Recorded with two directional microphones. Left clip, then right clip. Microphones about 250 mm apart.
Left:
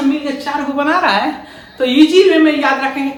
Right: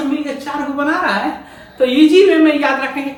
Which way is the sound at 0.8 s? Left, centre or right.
Left.